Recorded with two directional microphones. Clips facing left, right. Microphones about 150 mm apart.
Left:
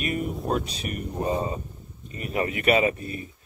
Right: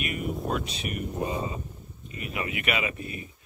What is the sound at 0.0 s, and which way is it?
Speech, 40° left (ahead or behind).